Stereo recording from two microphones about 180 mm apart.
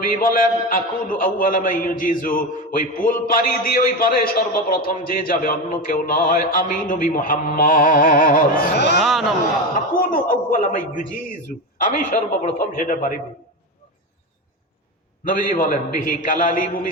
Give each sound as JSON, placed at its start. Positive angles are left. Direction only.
{"t": 0.0, "sound": "a man's voice", "side_deg": 50}
{"t": 9.0, "sound": "a man's voice", "side_deg": 0}
{"t": 9.9, "sound": "a man's voice", "side_deg": 50}
{"t": 15.2, "sound": "a man's voice", "side_deg": 50}